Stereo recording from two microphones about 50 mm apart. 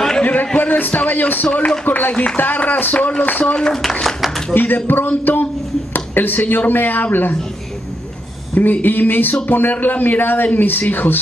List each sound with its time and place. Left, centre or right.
0.2 s a sound: left
0.6 s a man's voice: left
3.5 s speech: centre
4.0 s a sound: centre
4.6 s a man's voice: left
8.8 s a man's voice: left